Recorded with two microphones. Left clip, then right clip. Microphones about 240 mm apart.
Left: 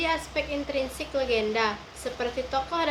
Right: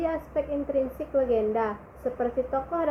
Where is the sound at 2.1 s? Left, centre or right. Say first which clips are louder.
Even; left.